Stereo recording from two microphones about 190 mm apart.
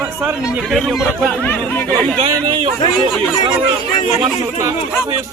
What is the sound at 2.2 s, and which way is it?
Speech, 25° right (ahead or behind).